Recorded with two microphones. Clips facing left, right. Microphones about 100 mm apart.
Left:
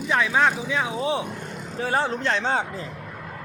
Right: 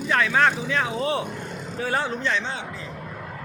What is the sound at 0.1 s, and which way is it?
Speech, 15° left (ahead or behind).